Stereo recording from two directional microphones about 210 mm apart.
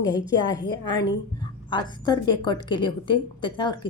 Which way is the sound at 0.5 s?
20° left (ahead or behind).